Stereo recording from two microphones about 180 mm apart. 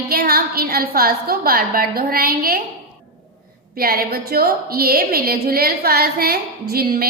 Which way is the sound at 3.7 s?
55° right (ahead or behind).